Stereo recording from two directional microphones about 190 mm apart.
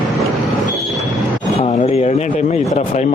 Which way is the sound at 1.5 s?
35° left (ahead or behind).